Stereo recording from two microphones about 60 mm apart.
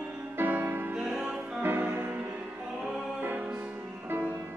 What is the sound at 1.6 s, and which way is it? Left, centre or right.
Music, right.